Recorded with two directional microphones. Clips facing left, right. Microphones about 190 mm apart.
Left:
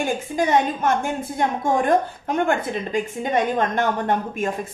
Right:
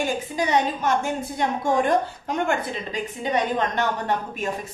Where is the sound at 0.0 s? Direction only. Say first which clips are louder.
Left 3 dB; 50° left (ahead or behind).